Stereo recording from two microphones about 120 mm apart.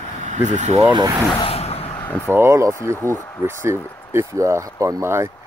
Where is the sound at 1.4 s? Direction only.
55° left (ahead or behind).